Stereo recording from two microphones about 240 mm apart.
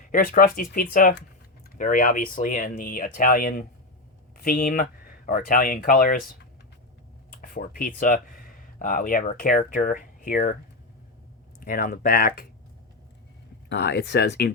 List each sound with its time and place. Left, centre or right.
0.0 s speech: left
7.3 s speech: left
11.6 s speech: left
13.7 s speech: left